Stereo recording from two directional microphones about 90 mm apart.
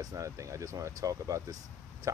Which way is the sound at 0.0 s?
40° right (ahead or behind).